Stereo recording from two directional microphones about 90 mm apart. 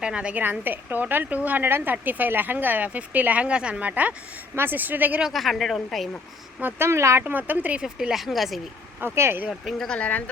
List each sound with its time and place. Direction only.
0.0 s a woman's voice: 10° right (ahead or behind)
5.2 s speech: centre (ahead or behind)
6.6 s a woman's voice: 25° right (ahead or behind)
7.8 s speech: 5° right (ahead or behind)
9.1 s a woman's voice: 25° right (ahead or behind)
9.5 s speech: centre (ahead or behind)